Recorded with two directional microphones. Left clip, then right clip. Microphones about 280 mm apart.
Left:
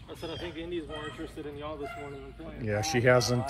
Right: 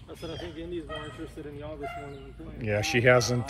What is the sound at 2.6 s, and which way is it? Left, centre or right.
Speech, centre.